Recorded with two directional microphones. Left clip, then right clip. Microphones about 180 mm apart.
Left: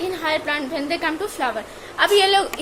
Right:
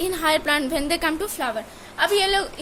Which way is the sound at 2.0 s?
15° right (ahead or behind).